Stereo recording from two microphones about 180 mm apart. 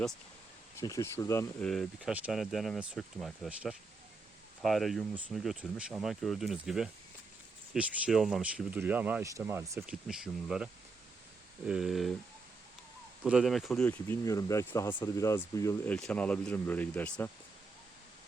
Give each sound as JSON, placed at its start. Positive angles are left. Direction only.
{"t": 0.8, "sound": "speech", "side_deg": 15}
{"t": 1.6, "sound": "speech", "side_deg": 0}
{"t": 9.9, "sound": "speech", "side_deg": -5}
{"t": 13.2, "sound": "speech", "side_deg": -5}